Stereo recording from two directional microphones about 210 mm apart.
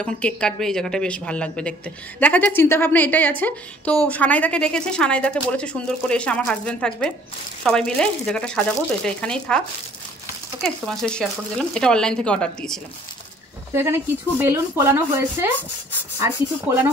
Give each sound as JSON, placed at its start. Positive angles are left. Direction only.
{"t": 0.0, "sound": "speech", "side_deg": 5}
{"t": 10.6, "sound": "speech", "side_deg": 5}
{"t": 13.7, "sound": "a woman's voice", "side_deg": -10}